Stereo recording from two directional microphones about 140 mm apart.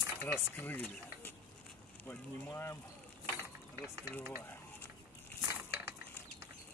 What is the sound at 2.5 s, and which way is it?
Speech, 20° left (ahead or behind).